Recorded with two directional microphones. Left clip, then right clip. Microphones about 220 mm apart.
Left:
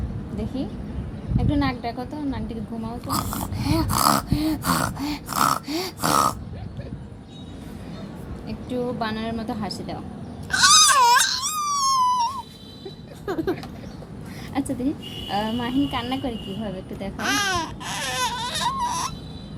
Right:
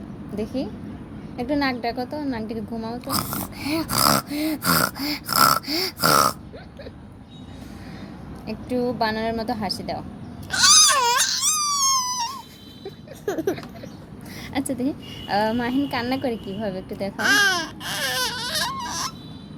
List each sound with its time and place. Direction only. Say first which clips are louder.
1.4 s a woman's voice: right 2 dB; 45° right (ahead or behind)
3.1 s a sound: left 1 dB; 25° right (ahead or behind)
8.4 s a woman's voice: right 3 dB; 45° right (ahead or behind)
10.5 s a sound: left 1 dB; 20° right (ahead or behind)
14.5 s a woman's voice: even; 45° right (ahead or behind)
17.2 s baby cry: right 4 dB; 20° right (ahead or behind)